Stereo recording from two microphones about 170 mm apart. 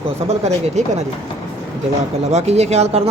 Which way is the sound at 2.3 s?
40° right (ahead or behind).